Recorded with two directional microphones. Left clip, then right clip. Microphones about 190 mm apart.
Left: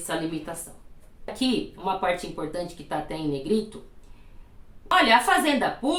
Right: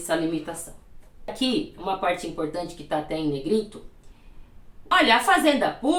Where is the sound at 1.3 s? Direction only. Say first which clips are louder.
Right 1 dB; 20° left (ahead or behind).